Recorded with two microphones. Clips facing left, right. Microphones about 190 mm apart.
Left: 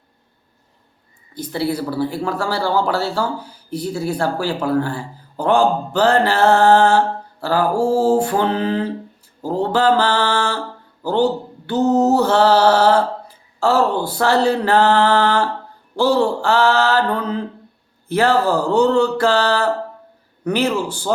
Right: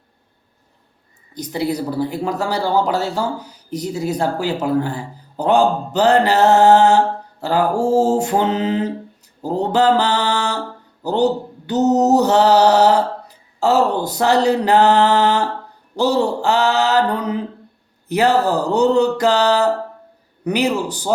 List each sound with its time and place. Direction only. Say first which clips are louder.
1.3 s speech: even; 15° right (ahead or behind)
7.7 s mantra: even; 10° left (ahead or behind)
7.9 s speech: right 1 dB; 20° right (ahead or behind)
11.0 s a sound: even; 20° right (ahead or behind)
13.6 s speech: right 1 dB; 20° right (ahead or behind)
18.1 s a sound: even; 15° right (ahead or behind)